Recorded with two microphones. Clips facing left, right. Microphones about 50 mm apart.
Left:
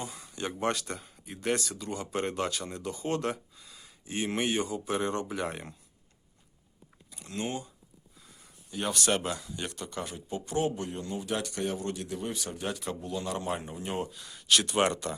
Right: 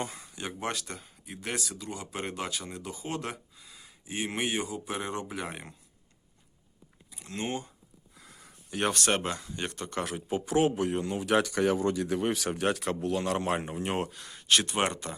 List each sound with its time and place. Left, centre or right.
0.3 s speech: centre
7.1 s a sound: centre
7.3 s speech: right
8.1 s a sound: right
8.9 s speech: right
9.7 s speech: right
10.0 s speech: right
14.3 s speech: right